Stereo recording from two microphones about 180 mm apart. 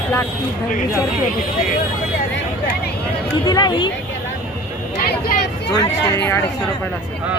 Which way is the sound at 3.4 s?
25° left (ahead or behind).